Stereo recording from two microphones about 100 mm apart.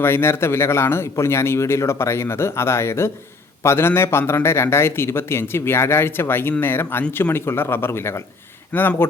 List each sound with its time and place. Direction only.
0.0 s a man's voice: 25° left (ahead or behind)